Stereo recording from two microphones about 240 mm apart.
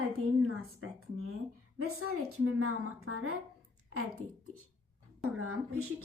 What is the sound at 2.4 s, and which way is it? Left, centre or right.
Speech, right.